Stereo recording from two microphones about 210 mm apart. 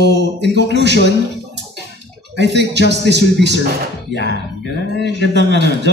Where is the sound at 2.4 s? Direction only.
55° right (ahead or behind).